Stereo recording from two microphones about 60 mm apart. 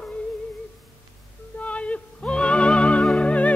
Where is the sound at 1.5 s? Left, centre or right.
Left.